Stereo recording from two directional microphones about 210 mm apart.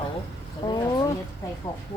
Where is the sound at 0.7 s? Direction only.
20° left (ahead or behind).